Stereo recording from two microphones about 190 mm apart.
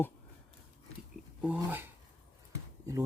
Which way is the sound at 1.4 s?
10° right (ahead or behind).